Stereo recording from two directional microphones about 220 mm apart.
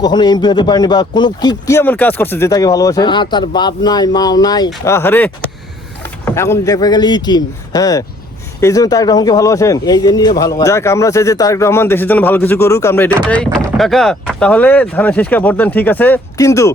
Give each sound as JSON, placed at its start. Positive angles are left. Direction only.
{"t": 0.0, "sound": "a man's voice", "side_deg": 20}